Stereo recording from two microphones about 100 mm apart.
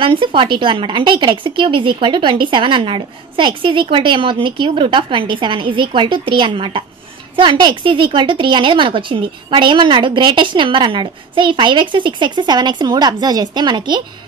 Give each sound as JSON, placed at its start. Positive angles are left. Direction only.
{"t": 0.0, "sound": "a woman's voice", "side_deg": -60}